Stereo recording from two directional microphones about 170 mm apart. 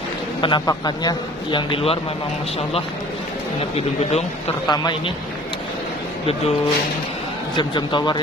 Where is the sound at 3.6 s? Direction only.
35° left (ahead or behind).